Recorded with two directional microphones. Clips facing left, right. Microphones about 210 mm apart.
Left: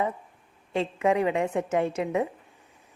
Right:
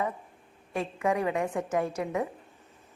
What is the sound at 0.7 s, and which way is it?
A woman's voice, 25° left (ahead or behind).